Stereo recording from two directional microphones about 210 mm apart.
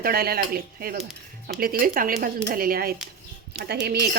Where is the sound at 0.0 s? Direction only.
45° right (ahead or behind).